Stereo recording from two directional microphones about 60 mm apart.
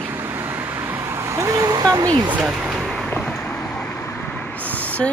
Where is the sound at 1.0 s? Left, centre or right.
Right.